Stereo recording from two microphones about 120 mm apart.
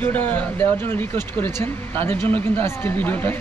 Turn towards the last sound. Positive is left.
turn(degrees=15)  # may be behind; listen again after turning